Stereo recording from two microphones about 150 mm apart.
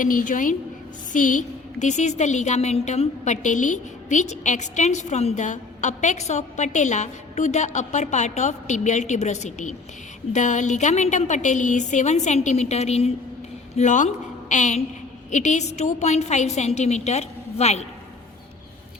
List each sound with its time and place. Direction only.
0.0 s a woman's voice: 65° left (ahead or behind); by 13.1 s 45° left (ahead or behind)
13.7 s a woman's voice: 55° left (ahead or behind)